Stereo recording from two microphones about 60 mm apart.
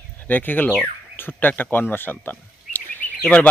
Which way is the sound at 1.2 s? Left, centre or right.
Left.